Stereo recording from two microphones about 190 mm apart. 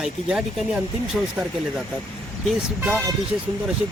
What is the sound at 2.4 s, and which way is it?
Speech, 5° right (ahead or behind).